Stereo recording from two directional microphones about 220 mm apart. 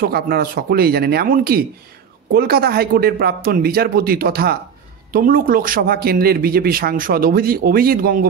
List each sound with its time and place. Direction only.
0.0 s speech: 45° right (ahead or behind)